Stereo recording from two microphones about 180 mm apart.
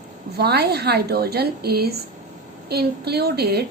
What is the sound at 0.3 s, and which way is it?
A woman's voice, 65° right (ahead or behind).